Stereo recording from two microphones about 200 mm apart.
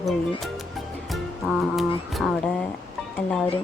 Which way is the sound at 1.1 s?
Centre (ahead or behind).